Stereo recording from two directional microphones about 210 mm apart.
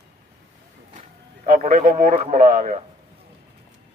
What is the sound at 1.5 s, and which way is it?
A man's voice, 40° right (ahead or behind).